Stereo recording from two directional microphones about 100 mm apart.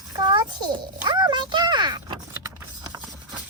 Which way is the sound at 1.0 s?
45° right (ahead or behind).